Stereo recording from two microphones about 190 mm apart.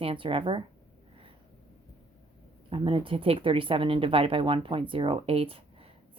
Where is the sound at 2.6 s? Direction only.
25° right (ahead or behind).